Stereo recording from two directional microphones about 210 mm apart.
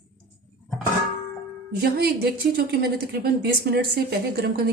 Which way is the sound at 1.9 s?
50° right (ahead or behind).